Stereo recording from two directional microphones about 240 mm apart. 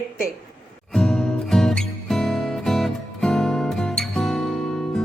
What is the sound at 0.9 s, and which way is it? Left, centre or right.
Music, centre.